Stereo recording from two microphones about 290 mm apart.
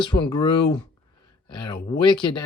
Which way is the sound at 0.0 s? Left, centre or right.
Centre.